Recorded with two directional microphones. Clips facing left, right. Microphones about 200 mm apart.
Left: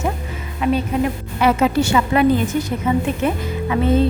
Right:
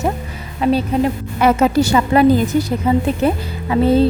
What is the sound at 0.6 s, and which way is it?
Speech, 35° right (ahead or behind).